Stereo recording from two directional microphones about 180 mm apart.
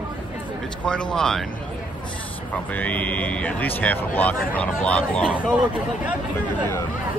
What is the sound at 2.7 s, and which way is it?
Speech, 10° left (ahead or behind).